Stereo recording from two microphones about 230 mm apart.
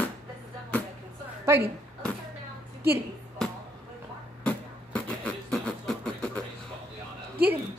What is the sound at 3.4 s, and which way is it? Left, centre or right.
Music, centre.